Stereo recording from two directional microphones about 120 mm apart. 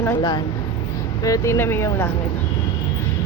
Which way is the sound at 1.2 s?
25° left (ahead or behind).